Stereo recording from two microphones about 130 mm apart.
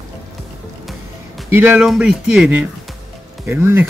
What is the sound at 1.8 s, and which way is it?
Speech, 5° right (ahead or behind).